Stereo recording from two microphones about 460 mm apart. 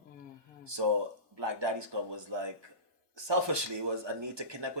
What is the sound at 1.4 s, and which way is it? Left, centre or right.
Speech, right.